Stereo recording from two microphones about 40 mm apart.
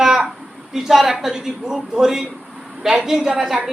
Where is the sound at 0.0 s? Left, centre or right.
Centre.